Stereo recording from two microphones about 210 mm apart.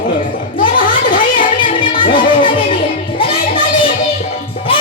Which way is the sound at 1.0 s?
40° left (ahead or behind).